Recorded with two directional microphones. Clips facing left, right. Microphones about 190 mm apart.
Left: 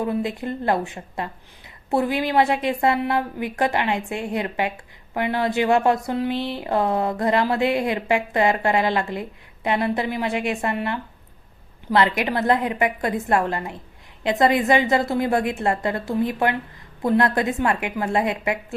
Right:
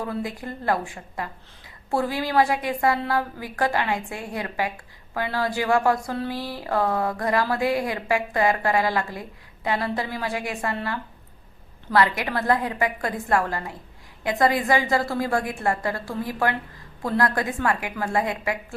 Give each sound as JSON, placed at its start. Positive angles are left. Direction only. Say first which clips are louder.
{"t": 0.0, "sound": "speech", "louder": "left 5 dB", "side_deg": 25}